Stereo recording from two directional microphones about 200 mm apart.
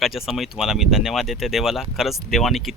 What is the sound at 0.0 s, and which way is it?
Speech, centre (ahead or behind).